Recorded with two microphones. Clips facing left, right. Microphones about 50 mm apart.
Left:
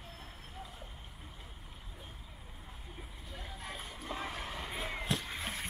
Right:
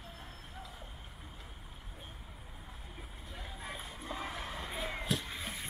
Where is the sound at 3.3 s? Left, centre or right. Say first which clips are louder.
Even; centre.